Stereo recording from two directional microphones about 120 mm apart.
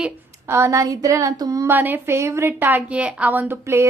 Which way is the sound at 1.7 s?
15° right (ahead or behind).